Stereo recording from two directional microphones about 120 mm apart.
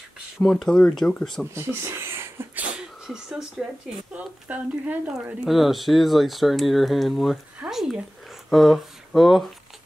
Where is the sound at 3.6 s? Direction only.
5° right (ahead or behind).